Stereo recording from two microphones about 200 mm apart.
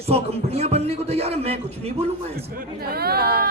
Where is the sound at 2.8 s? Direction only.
50° right (ahead or behind).